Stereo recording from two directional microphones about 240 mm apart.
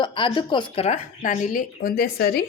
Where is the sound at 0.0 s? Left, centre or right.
Centre.